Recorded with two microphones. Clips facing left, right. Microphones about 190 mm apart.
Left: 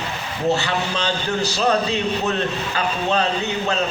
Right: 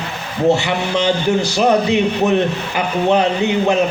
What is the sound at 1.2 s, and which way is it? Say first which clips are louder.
A man's voice: right 3 dB; 15° right (ahead or behind).